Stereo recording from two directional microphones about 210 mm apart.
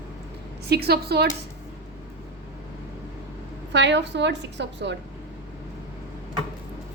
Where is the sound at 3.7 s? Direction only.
55° right (ahead or behind).